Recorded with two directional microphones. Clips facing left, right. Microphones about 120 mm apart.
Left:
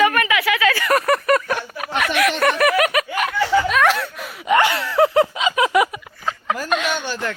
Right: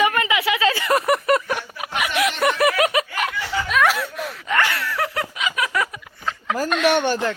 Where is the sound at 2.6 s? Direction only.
25° right (ahead or behind).